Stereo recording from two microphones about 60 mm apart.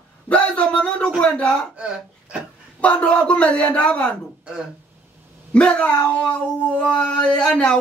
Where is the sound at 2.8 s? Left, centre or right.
Left.